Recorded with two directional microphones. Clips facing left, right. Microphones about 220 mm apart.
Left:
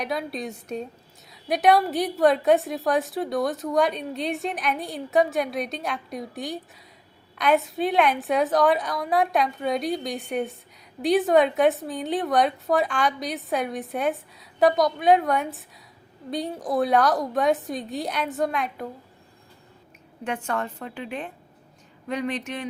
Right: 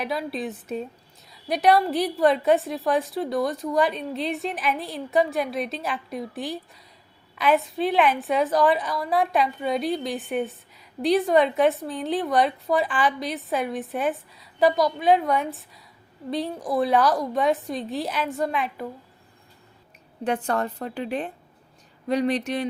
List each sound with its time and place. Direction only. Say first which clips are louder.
0.0 s a woman's voice: right 1 dB; centre (ahead or behind)
20.2 s a woman's voice: right 4 dB; 35° right (ahead or behind)